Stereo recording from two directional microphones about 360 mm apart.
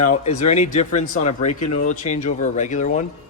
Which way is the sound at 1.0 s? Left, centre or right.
Centre.